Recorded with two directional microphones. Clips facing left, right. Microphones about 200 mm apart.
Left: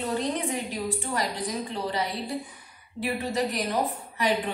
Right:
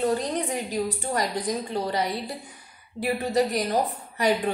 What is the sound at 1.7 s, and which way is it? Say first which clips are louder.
A woman's voice: right 3 dB; 40° right (ahead or behind).